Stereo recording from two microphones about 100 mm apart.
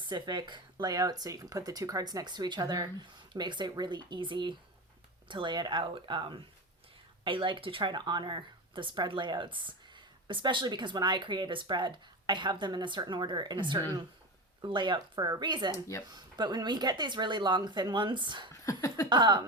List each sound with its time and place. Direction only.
0.0 s speech: 50° right (ahead or behind)
18.6 s a sound: 35° left (ahead or behind)
19.0 s speech: 50° right (ahead or behind)